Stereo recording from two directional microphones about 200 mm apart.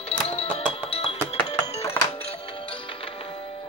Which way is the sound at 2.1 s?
30° left (ahead or behind).